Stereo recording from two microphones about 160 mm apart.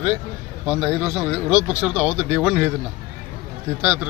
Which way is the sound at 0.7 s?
15° right (ahead or behind).